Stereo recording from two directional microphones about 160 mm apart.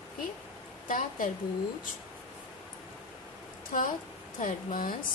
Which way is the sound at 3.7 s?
60° left (ahead or behind).